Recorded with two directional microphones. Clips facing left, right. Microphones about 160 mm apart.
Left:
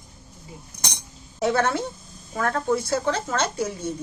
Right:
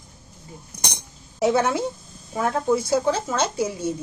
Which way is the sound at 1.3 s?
10° right (ahead or behind).